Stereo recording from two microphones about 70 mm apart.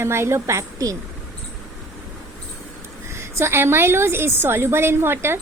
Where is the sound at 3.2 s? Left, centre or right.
Right.